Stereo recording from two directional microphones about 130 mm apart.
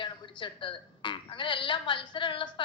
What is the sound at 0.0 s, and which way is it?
A woman's voice, 40° left (ahead or behind).